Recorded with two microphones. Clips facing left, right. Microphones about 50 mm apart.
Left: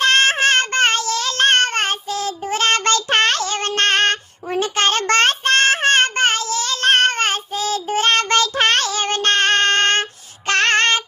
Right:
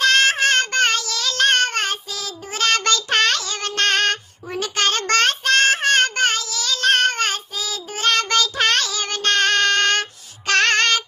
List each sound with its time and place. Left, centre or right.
0.0 s child singing: left